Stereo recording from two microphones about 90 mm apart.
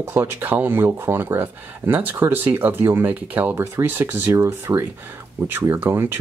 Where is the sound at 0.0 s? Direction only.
25° right (ahead or behind).